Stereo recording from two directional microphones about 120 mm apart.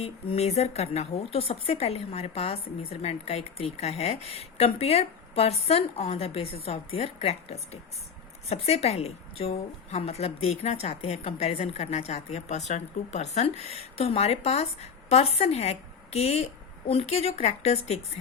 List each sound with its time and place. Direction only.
0.0 s a woman's voice: 60° left (ahead or behind)